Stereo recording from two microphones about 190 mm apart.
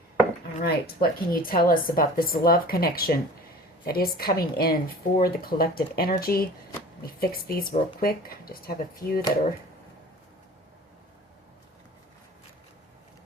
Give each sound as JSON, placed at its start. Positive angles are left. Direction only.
{"t": 0.6, "sound": "a woman's voice", "side_deg": 55}